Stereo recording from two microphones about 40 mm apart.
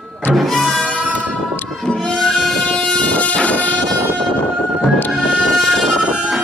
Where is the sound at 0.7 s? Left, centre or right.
Left.